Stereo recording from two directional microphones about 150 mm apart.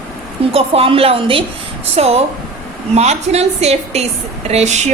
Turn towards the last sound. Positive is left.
turn(degrees=-50)  # may be behind; listen again after turning